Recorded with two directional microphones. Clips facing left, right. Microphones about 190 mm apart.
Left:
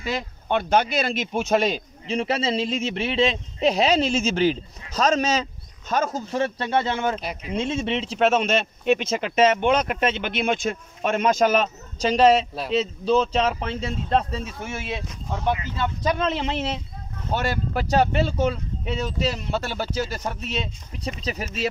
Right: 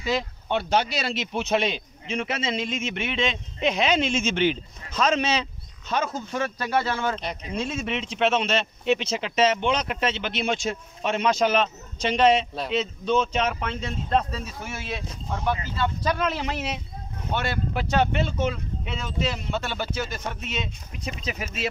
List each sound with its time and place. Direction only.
0.0 s speech: 50° left (ahead or behind); by 16.8 s 30° left (ahead or behind)
17.3 s speech: 40° left (ahead or behind)